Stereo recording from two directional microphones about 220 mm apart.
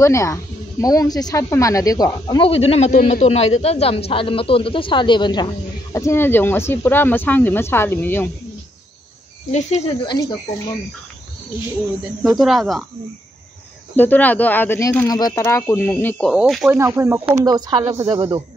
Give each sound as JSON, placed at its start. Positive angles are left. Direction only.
{"t": 0.0, "sound": "speech", "side_deg": 15}
{"t": 9.5, "sound": "speech", "side_deg": 30}
{"t": 12.4, "sound": "speech", "side_deg": 0}
{"t": 13.9, "sound": "speech", "side_deg": 10}
{"t": 16.7, "sound": "speech", "side_deg": -10}